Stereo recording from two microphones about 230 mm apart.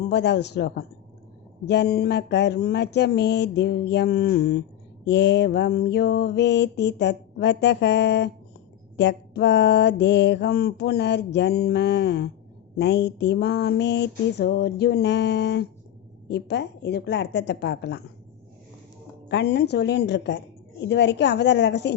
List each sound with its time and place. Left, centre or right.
0.1 s mantra: left
19.3 s mantra: left